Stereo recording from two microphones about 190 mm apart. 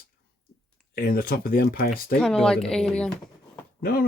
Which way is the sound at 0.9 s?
50° left (ahead or behind).